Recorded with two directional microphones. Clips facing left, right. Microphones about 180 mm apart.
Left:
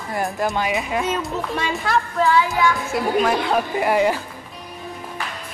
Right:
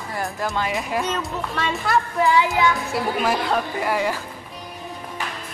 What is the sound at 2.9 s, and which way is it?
Speech, centre (ahead or behind).